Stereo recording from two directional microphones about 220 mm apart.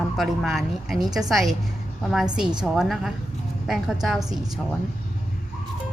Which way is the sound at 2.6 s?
Centre (ahead or behind).